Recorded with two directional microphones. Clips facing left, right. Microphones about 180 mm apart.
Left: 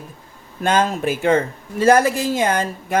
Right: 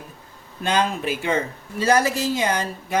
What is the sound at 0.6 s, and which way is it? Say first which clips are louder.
Speech: left 4 dB; 45° left (ahead or behind).